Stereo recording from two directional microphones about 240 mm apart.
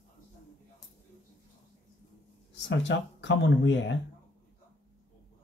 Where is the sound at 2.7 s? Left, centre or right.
Left.